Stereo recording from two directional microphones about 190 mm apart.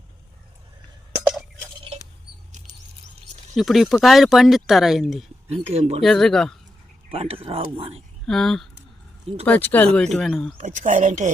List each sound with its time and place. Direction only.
2.5 s rodents: 40° right (ahead or behind)
3.5 s speech: centre (ahead or behind)
5.5 s speech: 35° right (ahead or behind)
6.0 s speech: centre (ahead or behind)
7.1 s speech: 30° right (ahead or behind)
8.3 s speech: centre (ahead or behind)
10.6 s speech: 40° right (ahead or behind)